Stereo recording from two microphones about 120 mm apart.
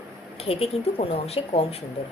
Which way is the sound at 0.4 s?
55° left (ahead or behind).